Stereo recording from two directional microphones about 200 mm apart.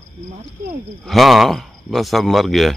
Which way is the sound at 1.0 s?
Centre (ahead or behind).